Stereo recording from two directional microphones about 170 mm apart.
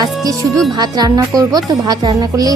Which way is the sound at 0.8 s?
25° right (ahead or behind).